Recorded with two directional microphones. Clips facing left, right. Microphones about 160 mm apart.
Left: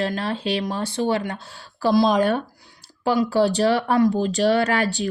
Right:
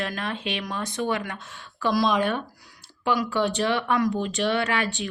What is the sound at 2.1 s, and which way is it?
Speech, 40° left (ahead or behind).